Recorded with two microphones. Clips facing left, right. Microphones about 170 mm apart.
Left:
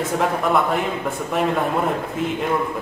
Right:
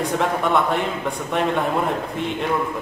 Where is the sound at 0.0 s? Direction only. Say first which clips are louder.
Even; centre (ahead or behind).